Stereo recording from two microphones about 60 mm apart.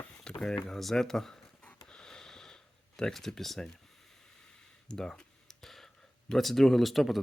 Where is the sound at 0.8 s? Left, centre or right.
Centre.